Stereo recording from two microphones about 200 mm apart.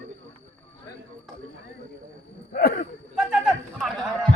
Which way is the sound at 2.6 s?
50° left (ahead or behind).